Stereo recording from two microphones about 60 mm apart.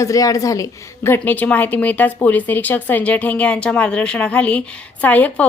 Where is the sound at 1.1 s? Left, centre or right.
Left.